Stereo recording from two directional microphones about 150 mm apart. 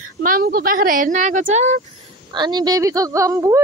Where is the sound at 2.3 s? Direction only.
30° right (ahead or behind).